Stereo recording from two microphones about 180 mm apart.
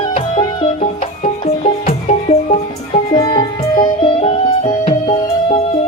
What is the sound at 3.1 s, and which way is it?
Music, 25° left (ahead or behind).